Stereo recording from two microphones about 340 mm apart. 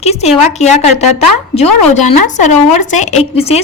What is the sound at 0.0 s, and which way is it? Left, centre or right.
Speech, centre.